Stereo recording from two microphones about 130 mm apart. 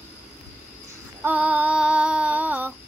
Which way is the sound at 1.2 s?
10° right (ahead or behind).